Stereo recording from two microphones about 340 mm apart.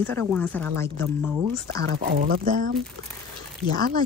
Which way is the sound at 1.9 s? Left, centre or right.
Right.